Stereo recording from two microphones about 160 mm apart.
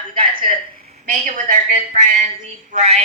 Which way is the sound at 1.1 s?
50° right (ahead or behind).